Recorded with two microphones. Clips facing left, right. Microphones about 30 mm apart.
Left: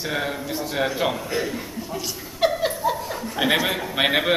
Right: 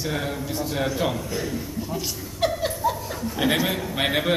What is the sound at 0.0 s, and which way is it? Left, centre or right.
Speech, centre.